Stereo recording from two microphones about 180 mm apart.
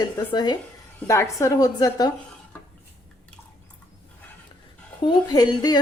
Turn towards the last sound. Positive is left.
turn(degrees=20)  # may be behind; listen again after turning